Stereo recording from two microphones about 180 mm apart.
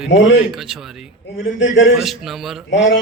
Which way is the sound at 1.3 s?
90° left.